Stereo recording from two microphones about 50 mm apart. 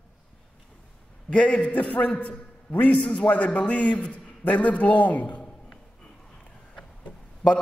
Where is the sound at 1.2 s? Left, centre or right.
Left.